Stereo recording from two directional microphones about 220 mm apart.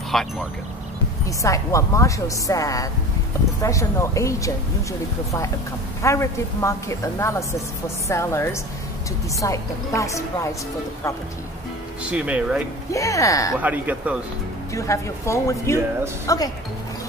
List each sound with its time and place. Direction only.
0.1 s speech: centre (ahead or behind)
1.4 s a woman's voice: 15° left (ahead or behind)
6.0 s a woman's voice: 15° left (ahead or behind)
12.1 s speech: 5° right (ahead or behind)
12.9 s a woman's voice: 15° left (ahead or behind)
13.6 s speech: 5° right (ahead or behind)
14.7 s a woman's voice: 15° left (ahead or behind)